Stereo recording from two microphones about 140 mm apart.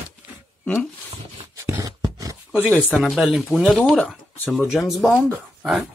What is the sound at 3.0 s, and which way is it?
Speech, 5° right (ahead or behind).